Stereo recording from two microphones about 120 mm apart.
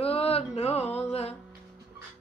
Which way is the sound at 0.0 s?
55° left (ahead or behind).